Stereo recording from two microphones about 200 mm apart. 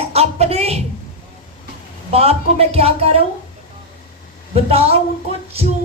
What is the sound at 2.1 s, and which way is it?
Speech, 30° right (ahead or behind).